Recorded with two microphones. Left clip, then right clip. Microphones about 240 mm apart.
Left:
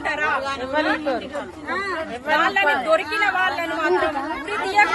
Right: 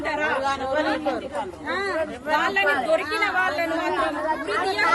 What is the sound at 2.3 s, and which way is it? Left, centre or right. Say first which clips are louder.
A woman's voice: left 3 dB; centre.